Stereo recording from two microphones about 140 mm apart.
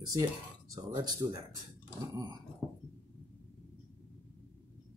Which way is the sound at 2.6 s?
Centre (ahead or behind).